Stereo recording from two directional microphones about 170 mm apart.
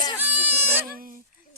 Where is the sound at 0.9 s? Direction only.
55° right (ahead or behind).